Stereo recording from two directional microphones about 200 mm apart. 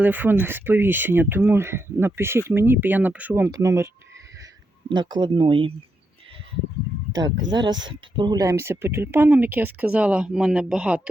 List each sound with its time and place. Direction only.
0.0 s speech: 10° right (ahead or behind)
4.9 s speech: 20° right (ahead or behind)
7.5 s speech: 20° right (ahead or behind); by 11.1 s 5° right (ahead or behind)